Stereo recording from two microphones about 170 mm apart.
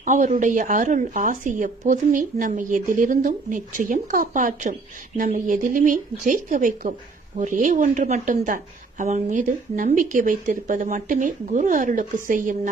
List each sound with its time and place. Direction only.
0.0 s a woman's voice: 50° right (ahead or behind)